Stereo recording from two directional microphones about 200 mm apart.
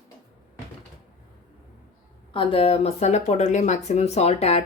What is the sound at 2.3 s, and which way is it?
Speech, 25° left (ahead or behind).